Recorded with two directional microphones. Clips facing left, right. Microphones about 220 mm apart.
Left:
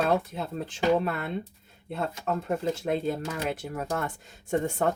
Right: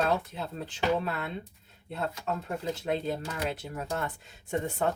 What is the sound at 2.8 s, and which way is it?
Speech, 50° left (ahead or behind).